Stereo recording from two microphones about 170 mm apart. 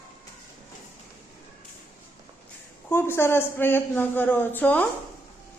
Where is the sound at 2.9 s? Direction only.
15° left (ahead or behind).